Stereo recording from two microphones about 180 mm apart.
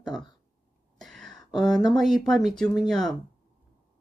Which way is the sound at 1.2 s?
Centre (ahead or behind).